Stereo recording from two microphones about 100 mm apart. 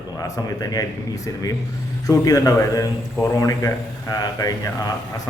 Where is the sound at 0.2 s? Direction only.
35° left (ahead or behind).